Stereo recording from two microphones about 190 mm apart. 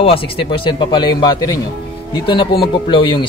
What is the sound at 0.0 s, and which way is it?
Speech, 30° left (ahead or behind).